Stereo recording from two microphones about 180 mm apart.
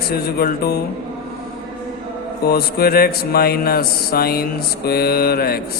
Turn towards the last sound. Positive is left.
turn(degrees=60)  # may be behind; listen again after turning